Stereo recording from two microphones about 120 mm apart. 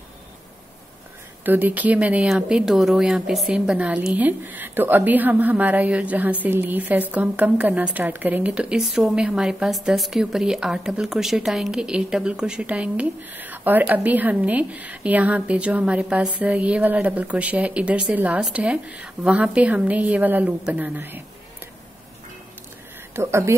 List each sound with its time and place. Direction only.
1.4 s speech: 15° right (ahead or behind)
23.1 s speech: 20° right (ahead or behind)